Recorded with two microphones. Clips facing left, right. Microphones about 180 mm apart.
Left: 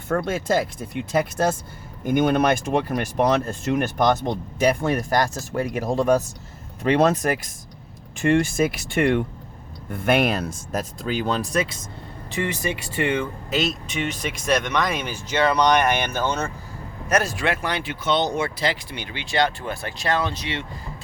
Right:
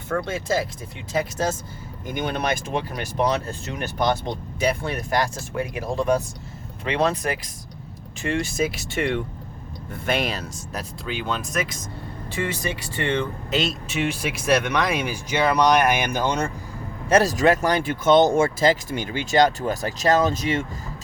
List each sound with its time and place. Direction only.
0.1 s speech: 55° left (ahead or behind); by 11.8 s 35° left (ahead or behind)
12.3 s speech: 20° left (ahead or behind)
13.1 s speech: 5° left (ahead or behind); by 16.5 s 15° right (ahead or behind)
17.1 s speech: 35° right (ahead or behind)